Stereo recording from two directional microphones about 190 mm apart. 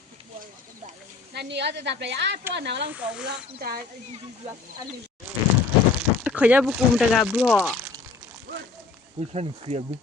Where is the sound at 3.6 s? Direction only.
50° right (ahead or behind).